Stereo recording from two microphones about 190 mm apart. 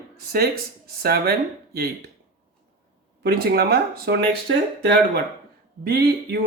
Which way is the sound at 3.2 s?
55° right (ahead or behind).